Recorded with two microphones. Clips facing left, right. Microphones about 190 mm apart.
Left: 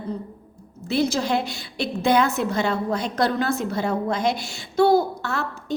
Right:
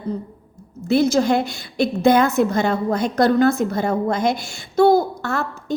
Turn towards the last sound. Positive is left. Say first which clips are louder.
# right 3 dB
turn(degrees=-50)  # may be behind; listen again after turning